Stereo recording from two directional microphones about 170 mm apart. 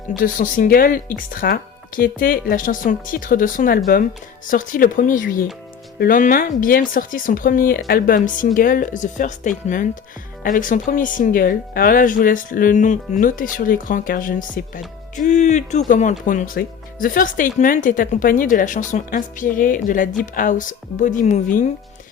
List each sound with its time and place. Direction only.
0.2 s speech: 50° left (ahead or behind)